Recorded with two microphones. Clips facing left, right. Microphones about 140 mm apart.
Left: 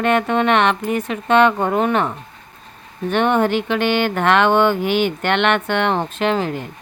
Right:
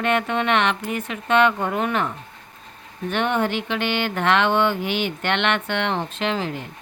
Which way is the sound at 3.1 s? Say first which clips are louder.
Left 6 dB; 40° left (ahead or behind).